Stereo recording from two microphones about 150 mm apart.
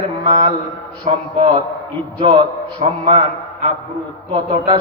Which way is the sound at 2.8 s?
40° right (ahead or behind).